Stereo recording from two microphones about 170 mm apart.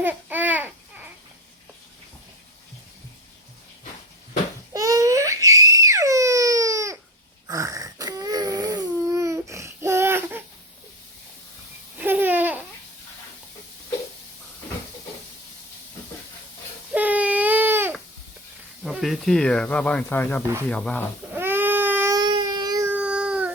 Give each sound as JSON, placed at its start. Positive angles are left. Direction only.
{"t": 0.0, "sound": "babbling", "side_deg": -10}
{"t": 4.7, "sound": "baby cry", "side_deg": -20}
{"t": 7.4, "sound": "crying", "side_deg": -20}
{"t": 11.9, "sound": "babbling", "side_deg": -10}
{"t": 16.9, "sound": "baby cry", "side_deg": -10}
{"t": 18.8, "sound": "speech", "side_deg": 0}
{"t": 21.3, "sound": "baby cry", "side_deg": -10}
{"t": 22.2, "sound": "a sound", "side_deg": -25}
{"t": 22.9, "sound": "a sound", "side_deg": -5}